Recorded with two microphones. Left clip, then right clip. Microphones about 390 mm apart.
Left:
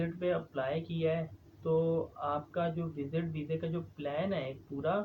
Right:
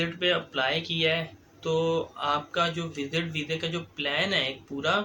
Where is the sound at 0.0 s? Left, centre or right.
Left.